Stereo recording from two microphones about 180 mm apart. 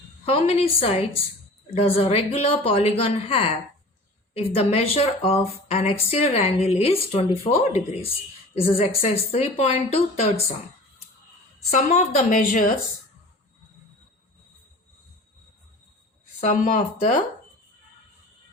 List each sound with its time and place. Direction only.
0.3 s speech: 30° left (ahead or behind)
8.7 s speech: 35° left (ahead or behind)
11.7 s speech: 40° left (ahead or behind)
16.4 s speech: 45° left (ahead or behind)